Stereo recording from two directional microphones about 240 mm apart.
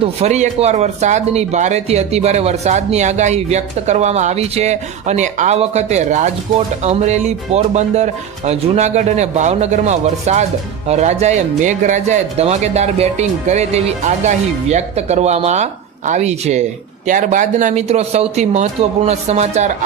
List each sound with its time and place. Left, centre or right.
0.0 s speech: right